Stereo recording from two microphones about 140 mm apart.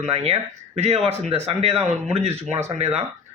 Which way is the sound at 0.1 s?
45° right (ahead or behind).